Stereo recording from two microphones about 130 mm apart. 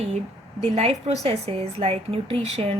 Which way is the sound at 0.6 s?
50° right (ahead or behind).